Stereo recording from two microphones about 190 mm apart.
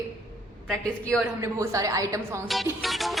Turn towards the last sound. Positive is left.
turn(degrees=0)  # may be behind; listen again after turning